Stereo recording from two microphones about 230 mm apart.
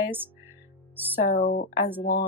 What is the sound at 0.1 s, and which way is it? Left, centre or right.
Music, centre.